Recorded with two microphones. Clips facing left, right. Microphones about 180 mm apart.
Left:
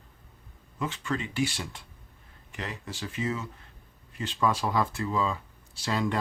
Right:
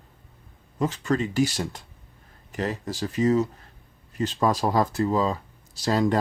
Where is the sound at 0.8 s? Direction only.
40° right (ahead or behind).